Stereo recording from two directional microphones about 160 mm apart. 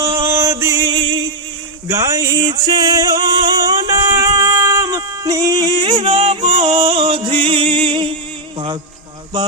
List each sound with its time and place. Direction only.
0.2 s chant: 15° right (ahead or behind)
0.9 s music: 30° right (ahead or behind)
1.9 s female singing: 20° right (ahead or behind)
8.5 s music: 30° right (ahead or behind)